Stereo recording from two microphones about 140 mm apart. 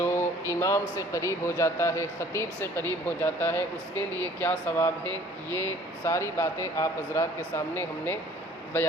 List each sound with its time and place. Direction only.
0.0 s speech: 20° left (ahead or behind)